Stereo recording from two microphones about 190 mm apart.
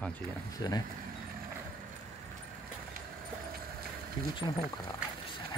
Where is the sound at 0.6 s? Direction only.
20° left (ahead or behind).